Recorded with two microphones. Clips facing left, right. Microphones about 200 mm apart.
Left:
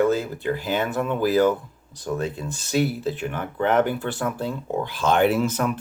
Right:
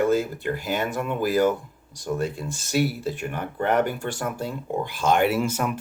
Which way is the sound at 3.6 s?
40° right (ahead or behind).